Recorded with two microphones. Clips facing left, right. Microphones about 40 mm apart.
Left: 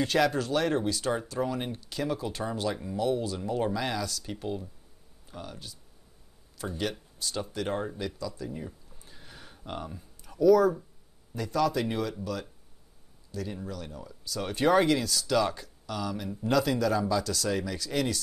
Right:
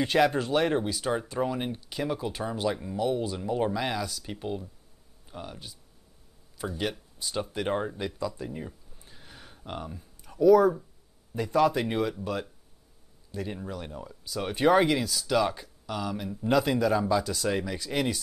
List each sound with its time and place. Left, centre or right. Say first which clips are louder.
0.0 s speech: right 2 dB; centre
6.8 s speech: even; centre
8.5 s a sound: right 1 dB; centre
11.3 s speech: right 3 dB; right
13.3 s speech: right 1 dB; right